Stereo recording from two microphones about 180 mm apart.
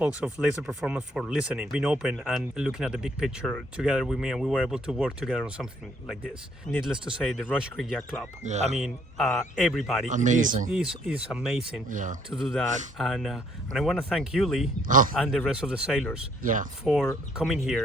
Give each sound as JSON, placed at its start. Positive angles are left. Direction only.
{"t": 0.3, "sound": "speech", "side_deg": -5}
{"t": 8.4, "sound": "speech", "side_deg": -40}
{"t": 8.8, "sound": "speech", "side_deg": 0}
{"t": 10.1, "sound": "speech", "side_deg": -45}
{"t": 10.7, "sound": "speech", "side_deg": -5}
{"t": 11.9, "sound": "speech", "side_deg": -45}
{"t": 12.3, "sound": "speech", "side_deg": 0}
{"t": 14.8, "sound": "speech", "side_deg": -45}
{"t": 15.1, "sound": "speech", "side_deg": 0}
{"t": 16.4, "sound": "speech", "side_deg": -50}
{"t": 16.8, "sound": "speech", "side_deg": 0}